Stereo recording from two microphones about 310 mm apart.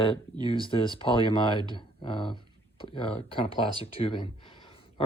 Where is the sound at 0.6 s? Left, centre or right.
Centre.